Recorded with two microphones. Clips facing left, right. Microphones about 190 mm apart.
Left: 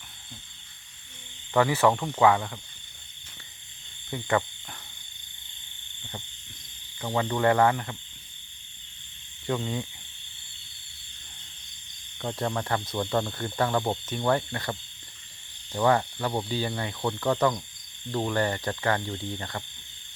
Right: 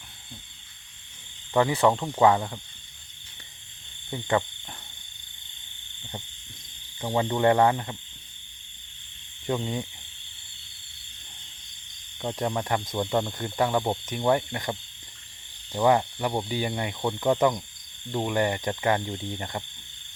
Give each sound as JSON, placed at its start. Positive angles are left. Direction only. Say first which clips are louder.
{"t": 1.5, "sound": "speech", "louder": "even", "side_deg": -20}
{"t": 4.1, "sound": "speech", "louder": "right 1 dB", "side_deg": -15}
{"t": 7.0, "sound": "speech", "louder": "right 2 dB", "side_deg": -20}
{"t": 9.6, "sound": "speech", "louder": "right 1 dB", "side_deg": -15}
{"t": 12.2, "sound": "speech", "louder": "right 1 dB", "side_deg": -15}